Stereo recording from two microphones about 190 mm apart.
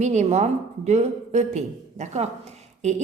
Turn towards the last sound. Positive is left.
turn(degrees=-35)  # may be behind; listen again after turning